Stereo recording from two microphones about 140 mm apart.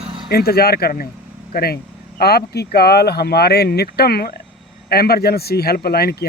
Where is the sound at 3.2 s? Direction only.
90° left.